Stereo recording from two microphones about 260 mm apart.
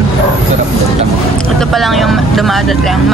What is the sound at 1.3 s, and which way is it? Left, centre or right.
Speech, centre.